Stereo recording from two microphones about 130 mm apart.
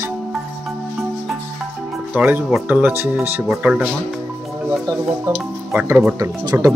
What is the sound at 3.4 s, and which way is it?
Speech, 5° right (ahead or behind).